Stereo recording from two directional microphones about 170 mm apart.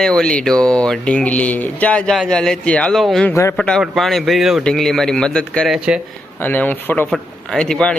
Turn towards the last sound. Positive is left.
turn(degrees=5)  # may be behind; listen again after turning